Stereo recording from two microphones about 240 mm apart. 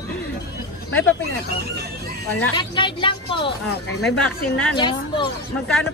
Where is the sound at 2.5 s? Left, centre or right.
Centre.